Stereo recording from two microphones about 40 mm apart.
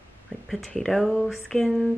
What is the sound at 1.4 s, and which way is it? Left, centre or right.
Speech, centre.